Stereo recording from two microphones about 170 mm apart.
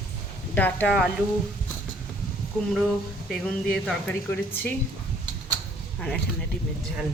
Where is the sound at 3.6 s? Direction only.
10° left (ahead or behind).